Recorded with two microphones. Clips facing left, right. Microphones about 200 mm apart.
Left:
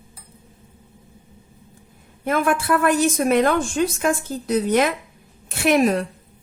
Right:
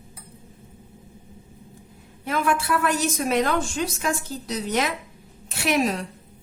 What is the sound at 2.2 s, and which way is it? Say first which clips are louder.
A woman's voice: left 4 dB; 55° left (ahead or behind).